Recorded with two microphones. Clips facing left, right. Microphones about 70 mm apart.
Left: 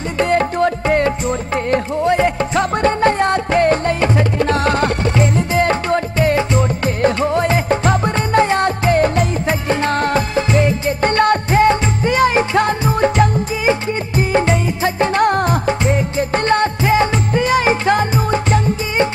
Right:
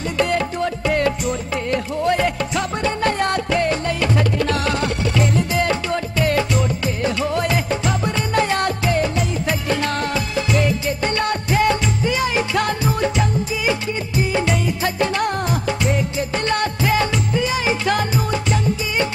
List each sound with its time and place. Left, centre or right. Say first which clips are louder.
0.2 s music: left 6 dB; left
2.0 s music: left 3 dB; left
2.5 s music: left 6 dB; left
3.0 s music: left 5 dB; left
4.1 s music: left 3 dB; left
5.1 s music: left 3 dB; left
7.0 s music: left 6 dB; left
8.9 s music: left 6 dB; left
9.5 s music: left 4 dB; left
11.5 s music: left 5 dB; left
17.3 s music: left 6 dB; left
17.8 s music: left 4 dB; left